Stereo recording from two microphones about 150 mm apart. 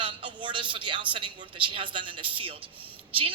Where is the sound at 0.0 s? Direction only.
35° right (ahead or behind).